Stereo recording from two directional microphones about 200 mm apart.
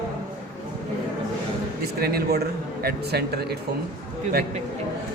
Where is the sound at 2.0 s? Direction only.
50° right (ahead or behind).